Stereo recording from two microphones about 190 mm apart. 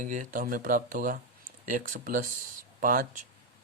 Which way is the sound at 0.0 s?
45° right (ahead or behind).